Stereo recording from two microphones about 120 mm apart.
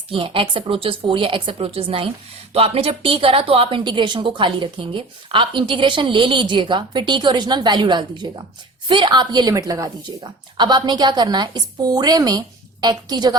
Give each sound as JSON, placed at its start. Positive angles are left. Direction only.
{"t": 0.1, "sound": "a woman's voice", "side_deg": -45}